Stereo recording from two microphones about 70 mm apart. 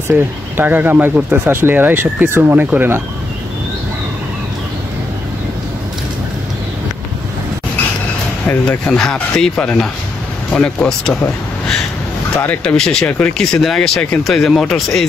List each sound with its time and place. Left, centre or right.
0.1 s speech: right
2.5 s speech: right
8.6 s speech: centre
12.6 s speech: centre